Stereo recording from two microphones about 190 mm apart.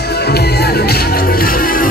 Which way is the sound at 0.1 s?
60° left (ahead or behind).